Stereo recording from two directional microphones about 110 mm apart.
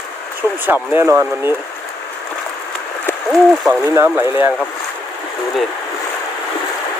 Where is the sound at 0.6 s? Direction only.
15° right (ahead or behind).